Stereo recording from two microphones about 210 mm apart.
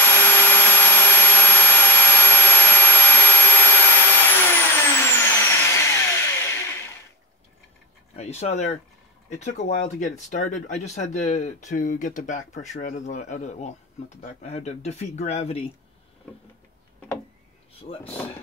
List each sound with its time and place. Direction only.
0.0 s a sound: 10° left (ahead or behind)
8.2 s speech: 30° left (ahead or behind)
17.9 s speech: 25° left (ahead or behind)